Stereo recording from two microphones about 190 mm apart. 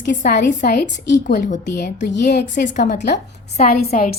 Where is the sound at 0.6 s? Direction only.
55° left (ahead or behind).